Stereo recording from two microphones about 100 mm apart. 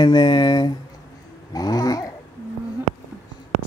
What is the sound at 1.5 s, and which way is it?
Cat, 40° left (ahead or behind).